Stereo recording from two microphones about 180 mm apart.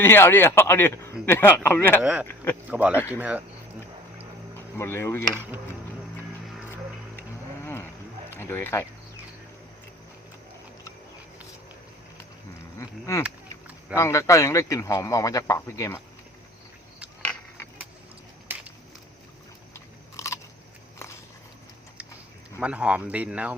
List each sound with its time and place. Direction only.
0.0 s speech: 10° left (ahead or behind)
2.6 s speech: 10° right (ahead or behind)
2.9 s speech: 10° left (ahead or behind)
3.2 s speech: 10° right (ahead or behind)
4.8 s speech: 15° left (ahead or behind)
7.6 s livestock: 15° left (ahead or behind)
8.3 s speech: 10° left (ahead or behind)
12.8 s speech: 15° left (ahead or behind)
18.5 s a sound: 10° right (ahead or behind)
19.7 s biting: 15° left (ahead or behind)
22.6 s speech: 5° right (ahead or behind)